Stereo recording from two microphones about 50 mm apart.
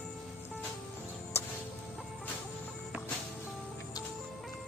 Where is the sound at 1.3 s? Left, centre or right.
Left.